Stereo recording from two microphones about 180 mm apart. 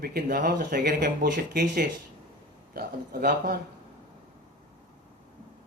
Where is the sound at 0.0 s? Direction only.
55° right (ahead or behind).